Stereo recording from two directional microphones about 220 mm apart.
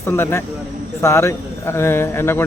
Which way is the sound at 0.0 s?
10° left (ahead or behind).